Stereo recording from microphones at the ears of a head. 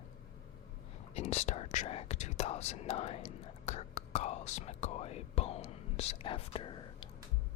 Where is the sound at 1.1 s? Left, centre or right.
Left.